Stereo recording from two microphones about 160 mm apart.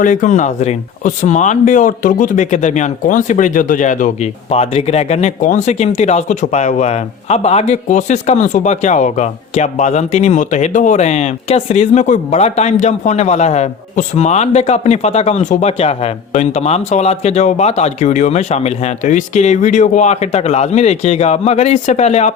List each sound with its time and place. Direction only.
0.0 s speech: 55° left (ahead or behind)